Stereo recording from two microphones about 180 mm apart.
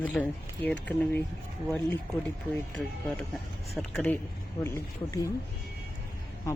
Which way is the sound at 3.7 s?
5° left (ahead or behind).